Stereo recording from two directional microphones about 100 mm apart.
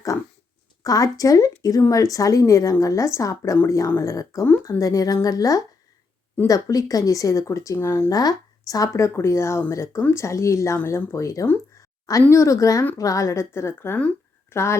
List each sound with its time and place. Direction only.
0.8 s a woman's voice: 35° left (ahead or behind)
8.1 s a woman's voice: 40° left (ahead or behind)